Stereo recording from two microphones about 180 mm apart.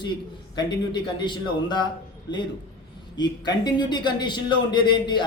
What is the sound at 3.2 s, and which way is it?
Speech, 25° left (ahead or behind).